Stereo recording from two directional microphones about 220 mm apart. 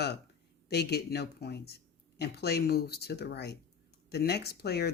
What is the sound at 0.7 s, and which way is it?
Speech, 50° left (ahead or behind).